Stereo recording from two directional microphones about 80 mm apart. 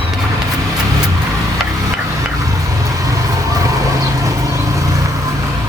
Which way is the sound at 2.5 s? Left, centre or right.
Right.